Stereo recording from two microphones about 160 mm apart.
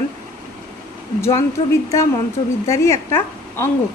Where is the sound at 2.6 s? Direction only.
20° left (ahead or behind).